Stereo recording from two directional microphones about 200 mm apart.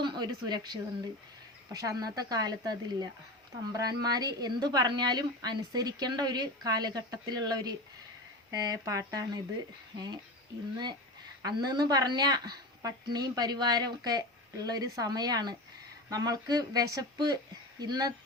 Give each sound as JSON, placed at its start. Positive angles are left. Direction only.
{"t": 0.0, "sound": "a woman's voice", "side_deg": -20}
{"t": 11.4, "sound": "a woman's voice", "side_deg": -20}